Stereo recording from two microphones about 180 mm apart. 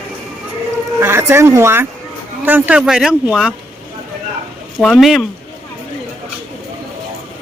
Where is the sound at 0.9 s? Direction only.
15° right (ahead or behind).